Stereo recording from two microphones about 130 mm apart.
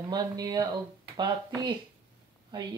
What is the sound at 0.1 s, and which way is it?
Speech, 30° right (ahead or behind).